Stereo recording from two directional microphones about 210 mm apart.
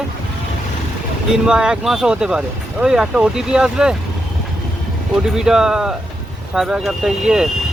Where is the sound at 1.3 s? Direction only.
5° right (ahead or behind).